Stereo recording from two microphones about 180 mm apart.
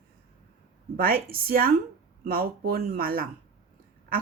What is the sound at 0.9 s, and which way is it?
Speech, 55° right (ahead or behind).